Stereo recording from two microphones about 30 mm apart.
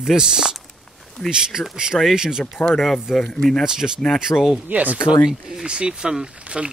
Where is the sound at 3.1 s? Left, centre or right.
Centre.